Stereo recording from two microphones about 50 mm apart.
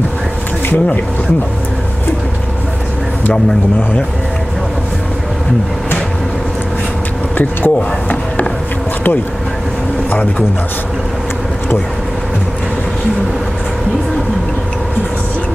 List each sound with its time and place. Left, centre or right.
7.3 s speech: left